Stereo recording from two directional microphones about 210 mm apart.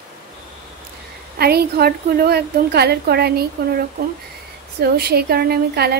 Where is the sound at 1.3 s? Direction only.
50° right (ahead or behind).